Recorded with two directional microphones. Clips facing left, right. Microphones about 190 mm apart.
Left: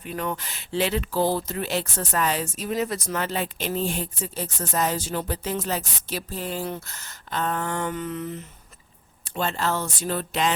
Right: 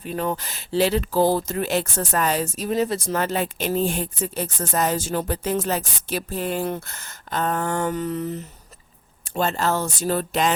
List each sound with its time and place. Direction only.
0.0 s speech: 35° right (ahead or behind)